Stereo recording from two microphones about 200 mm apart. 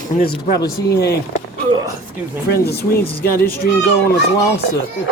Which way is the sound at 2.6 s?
50° left (ahead or behind).